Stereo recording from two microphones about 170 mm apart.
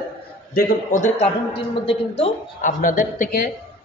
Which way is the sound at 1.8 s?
35° left (ahead or behind).